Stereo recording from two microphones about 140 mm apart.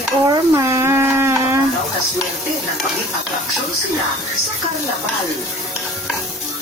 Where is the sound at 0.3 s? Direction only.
20° right (ahead or behind).